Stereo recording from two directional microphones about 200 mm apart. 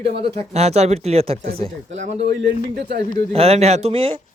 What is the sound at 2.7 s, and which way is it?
Speech, 55° right (ahead or behind).